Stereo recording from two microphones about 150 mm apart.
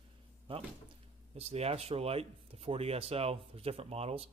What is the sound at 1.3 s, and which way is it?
Speech, 45° right (ahead or behind).